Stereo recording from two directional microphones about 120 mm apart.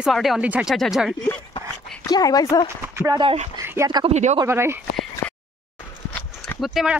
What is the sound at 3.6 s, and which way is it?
Dog, 20° right (ahead or behind).